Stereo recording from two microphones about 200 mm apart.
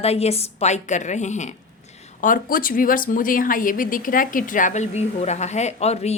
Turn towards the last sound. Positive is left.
turn(degrees=30)  # may be behind; listen again after turning